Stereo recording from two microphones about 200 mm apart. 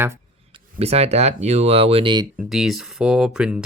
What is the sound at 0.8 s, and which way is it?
Speech, 30° right (ahead or behind).